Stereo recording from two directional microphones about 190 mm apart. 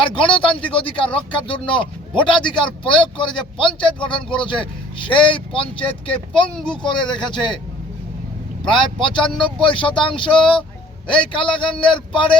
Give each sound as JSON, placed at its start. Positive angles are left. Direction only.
{"t": 0.0, "sound": "a man's voice", "side_deg": 25}
{"t": 8.7, "sound": "a man's voice", "side_deg": 25}